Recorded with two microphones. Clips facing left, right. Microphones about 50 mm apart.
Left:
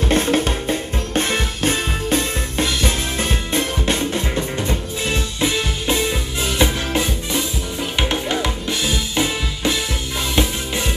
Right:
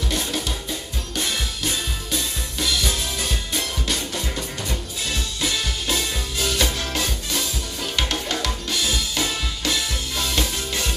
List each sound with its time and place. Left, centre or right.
0.1 s music: left
8.0 s drum: left
10.3 s music: left